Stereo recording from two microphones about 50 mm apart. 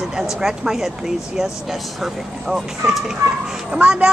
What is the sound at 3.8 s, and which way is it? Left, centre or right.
Speech, right.